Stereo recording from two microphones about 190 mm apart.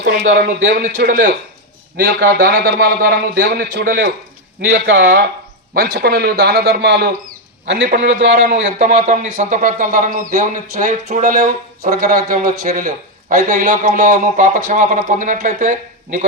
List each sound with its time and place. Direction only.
0.0 s a man's voice: 60° right (ahead or behind)
4.7 s speech: 80° right
5.7 s a man's voice: 55° right (ahead or behind)
8.3 s a man's voice: 35° right (ahead or behind)